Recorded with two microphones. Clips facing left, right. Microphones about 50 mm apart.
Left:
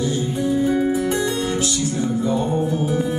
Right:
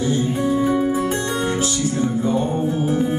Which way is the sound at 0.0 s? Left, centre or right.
Right.